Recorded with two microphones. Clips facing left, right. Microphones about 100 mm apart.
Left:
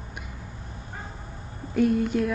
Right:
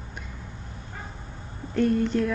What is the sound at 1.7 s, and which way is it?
Speech, 5° left (ahead or behind).